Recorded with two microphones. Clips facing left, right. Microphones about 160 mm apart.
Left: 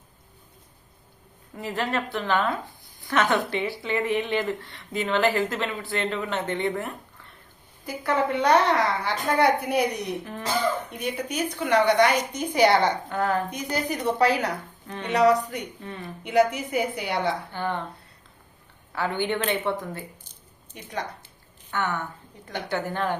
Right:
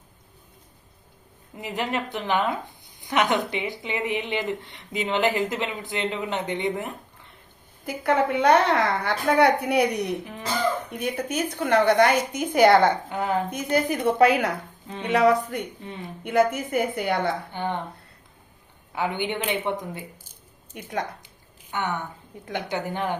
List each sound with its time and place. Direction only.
1.5 s a woman's voice: 15° right (ahead or behind)
7.9 s a woman's voice: 55° right (ahead or behind)
13.1 s a woman's voice: 15° right (ahead or behind)
13.5 s a woman's voice: 55° right (ahead or behind)
15.8 s speech: 20° right (ahead or behind)
16.2 s speech: 50° right (ahead or behind)
17.5 s a woman's voice: 20° right (ahead or behind)
18.9 s a woman's voice: 15° right (ahead or behind)
20.7 s speech: 55° right (ahead or behind)
21.7 s a woman's voice: 20° right (ahead or behind)